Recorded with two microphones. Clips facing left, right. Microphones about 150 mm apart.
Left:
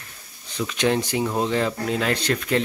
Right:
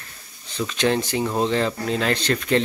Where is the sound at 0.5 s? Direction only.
10° left (ahead or behind).